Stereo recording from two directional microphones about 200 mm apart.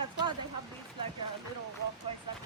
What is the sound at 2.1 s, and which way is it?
Vehicle, 25° right (ahead or behind).